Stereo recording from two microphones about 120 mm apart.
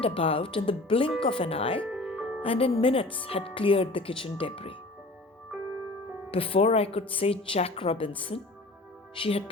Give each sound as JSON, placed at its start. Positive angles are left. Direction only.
{"t": 0.0, "sound": "speech", "side_deg": 50}
{"t": 1.9, "sound": "music", "side_deg": -5}
{"t": 2.4, "sound": "speech", "side_deg": 50}
{"t": 6.3, "sound": "speech", "side_deg": 50}